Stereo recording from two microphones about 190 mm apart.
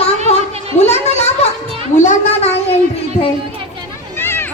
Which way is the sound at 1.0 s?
35° left (ahead or behind).